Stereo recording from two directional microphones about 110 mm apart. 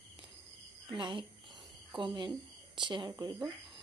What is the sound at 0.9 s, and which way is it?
Speech, 50° right (ahead or behind).